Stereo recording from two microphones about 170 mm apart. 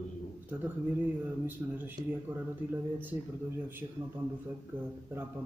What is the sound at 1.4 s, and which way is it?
Speech, 10° right (ahead or behind).